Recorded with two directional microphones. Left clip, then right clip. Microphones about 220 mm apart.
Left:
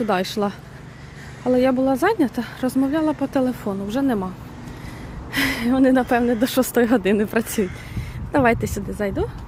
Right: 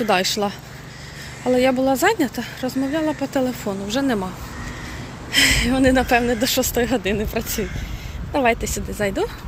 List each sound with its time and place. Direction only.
0.0 s speech: 15° left (ahead or behind)
5.3 s speech: 25° left (ahead or behind)
9.0 s speech: 15° left (ahead or behind)